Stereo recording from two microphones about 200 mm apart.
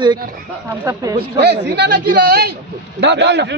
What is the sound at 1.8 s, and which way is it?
A man's voice, 50° right (ahead or behind).